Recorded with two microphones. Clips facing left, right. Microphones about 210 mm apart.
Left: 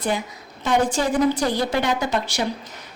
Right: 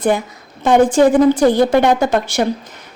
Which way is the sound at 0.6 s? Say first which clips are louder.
Right 10 dB; 50° right (ahead or behind).